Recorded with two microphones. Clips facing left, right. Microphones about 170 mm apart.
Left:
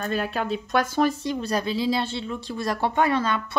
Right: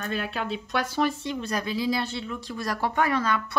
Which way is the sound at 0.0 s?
40° left (ahead or behind).